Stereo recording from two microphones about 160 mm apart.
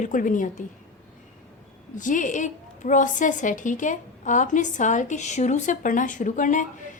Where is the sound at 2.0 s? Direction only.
55° left (ahead or behind).